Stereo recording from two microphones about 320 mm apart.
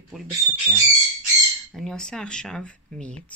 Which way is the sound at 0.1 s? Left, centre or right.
Centre.